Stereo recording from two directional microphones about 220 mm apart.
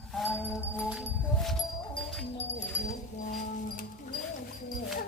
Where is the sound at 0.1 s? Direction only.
10° left (ahead or behind).